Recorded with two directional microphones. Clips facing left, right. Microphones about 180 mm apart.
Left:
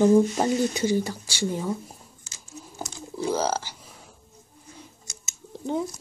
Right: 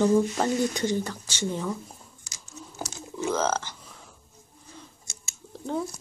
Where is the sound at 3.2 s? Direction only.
10° left (ahead or behind).